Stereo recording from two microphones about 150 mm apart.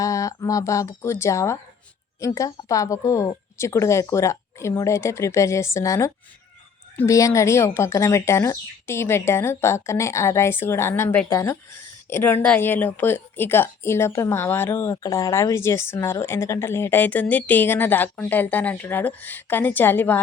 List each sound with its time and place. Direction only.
0.0 s a woman's voice: 20° left (ahead or behind)